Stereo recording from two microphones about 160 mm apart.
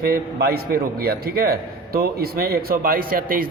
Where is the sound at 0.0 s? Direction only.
70° right (ahead or behind).